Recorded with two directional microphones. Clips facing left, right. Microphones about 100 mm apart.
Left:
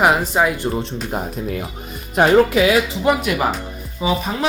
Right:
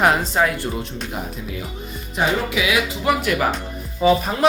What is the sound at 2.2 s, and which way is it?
Speech, 55° left (ahead or behind).